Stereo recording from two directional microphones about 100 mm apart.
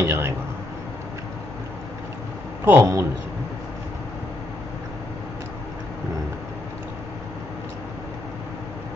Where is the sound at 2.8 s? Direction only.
30° right (ahead or behind).